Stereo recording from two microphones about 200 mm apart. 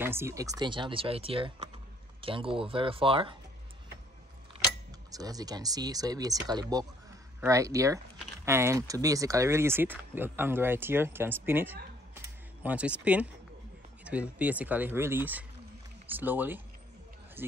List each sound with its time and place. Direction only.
0.0 s speech: 10° right (ahead or behind)
5.1 s speech: 20° right (ahead or behind)